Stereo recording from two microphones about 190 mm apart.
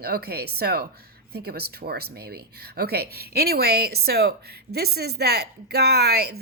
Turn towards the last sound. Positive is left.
turn(degrees=-55)  # may be behind; listen again after turning